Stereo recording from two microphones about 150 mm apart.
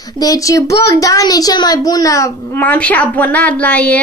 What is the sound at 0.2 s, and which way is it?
A child's voice, 25° left (ahead or behind).